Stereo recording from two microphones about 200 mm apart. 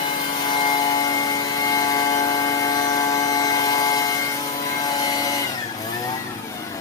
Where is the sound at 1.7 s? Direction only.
20° left (ahead or behind).